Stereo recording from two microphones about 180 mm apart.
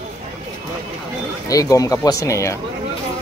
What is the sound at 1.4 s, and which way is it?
Speech, 20° left (ahead or behind).